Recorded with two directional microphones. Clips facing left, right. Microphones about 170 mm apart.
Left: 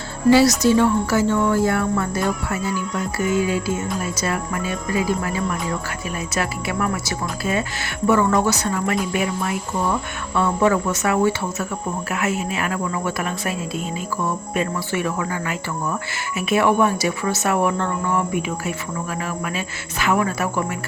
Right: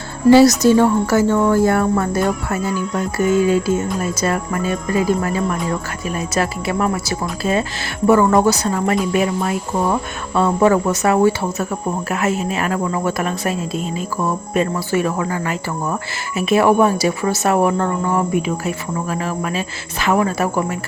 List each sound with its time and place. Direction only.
0.3 s speech: 45° right (ahead or behind)